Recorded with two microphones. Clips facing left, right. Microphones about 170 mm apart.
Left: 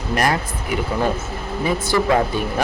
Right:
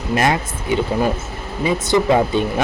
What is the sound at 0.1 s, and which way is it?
A man's voice, 25° right (ahead or behind).